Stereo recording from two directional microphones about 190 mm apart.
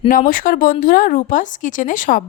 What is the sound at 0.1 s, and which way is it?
A woman's voice, 45° left (ahead or behind).